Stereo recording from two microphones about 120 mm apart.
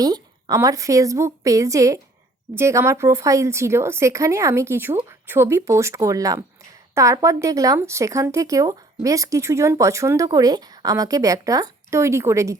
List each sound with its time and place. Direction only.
0.0 s speech: 35° right (ahead or behind)